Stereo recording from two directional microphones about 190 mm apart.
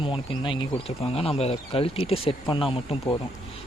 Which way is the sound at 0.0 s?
25° left (ahead or behind).